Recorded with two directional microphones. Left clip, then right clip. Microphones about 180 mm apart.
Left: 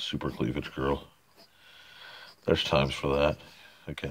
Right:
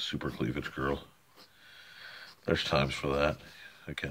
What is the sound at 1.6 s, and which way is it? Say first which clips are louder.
Wheeze: even; 25° left (ahead or behind).